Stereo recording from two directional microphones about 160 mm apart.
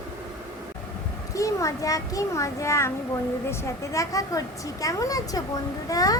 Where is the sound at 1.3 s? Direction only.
20° left (ahead or behind).